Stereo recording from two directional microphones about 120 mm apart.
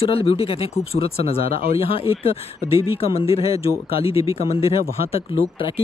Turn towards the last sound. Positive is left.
turn(degrees=50)  # may be behind; listen again after turning